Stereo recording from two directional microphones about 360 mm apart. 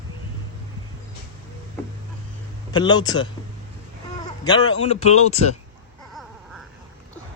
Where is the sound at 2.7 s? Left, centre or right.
Centre.